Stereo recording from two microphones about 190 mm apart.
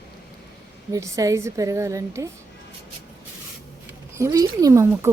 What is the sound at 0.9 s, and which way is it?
Speech, 15° right (ahead or behind).